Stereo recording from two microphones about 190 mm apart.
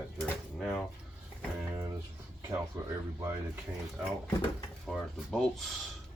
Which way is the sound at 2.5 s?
15° right (ahead or behind).